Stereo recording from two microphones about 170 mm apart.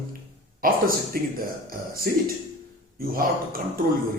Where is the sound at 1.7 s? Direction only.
60° right (ahead or behind).